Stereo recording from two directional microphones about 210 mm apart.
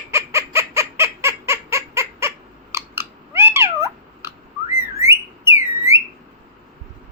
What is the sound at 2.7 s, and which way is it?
Cat, 10° right (ahead or behind).